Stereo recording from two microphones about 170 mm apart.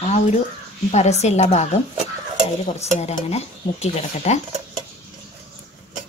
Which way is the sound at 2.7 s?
40° left (ahead or behind).